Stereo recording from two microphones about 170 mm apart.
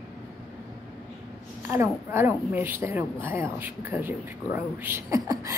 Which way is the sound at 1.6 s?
15° right (ahead or behind).